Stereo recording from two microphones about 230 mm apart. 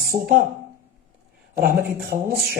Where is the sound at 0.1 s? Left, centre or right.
Right.